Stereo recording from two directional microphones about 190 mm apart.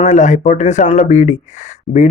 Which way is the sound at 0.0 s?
40° left (ahead or behind).